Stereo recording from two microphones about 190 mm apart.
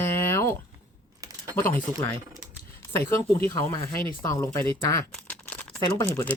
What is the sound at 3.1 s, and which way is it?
Speech, 15° left (ahead or behind).